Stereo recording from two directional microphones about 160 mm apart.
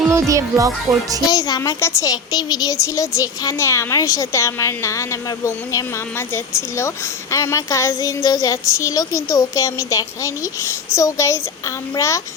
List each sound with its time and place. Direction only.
0.1 s speech: 20° right (ahead or behind)
1.3 s speech: 25° left (ahead or behind)